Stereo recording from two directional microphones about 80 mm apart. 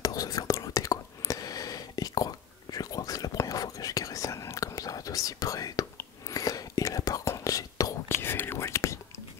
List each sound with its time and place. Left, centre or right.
0.0 s whispering: left
8.1 s whispering: left